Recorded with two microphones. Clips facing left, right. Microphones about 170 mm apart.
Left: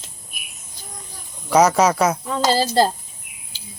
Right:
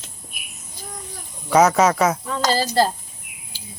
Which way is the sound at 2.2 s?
15° left (ahead or behind).